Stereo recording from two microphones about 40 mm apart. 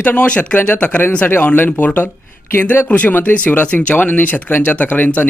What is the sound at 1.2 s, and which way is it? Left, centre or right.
A man's voice, left.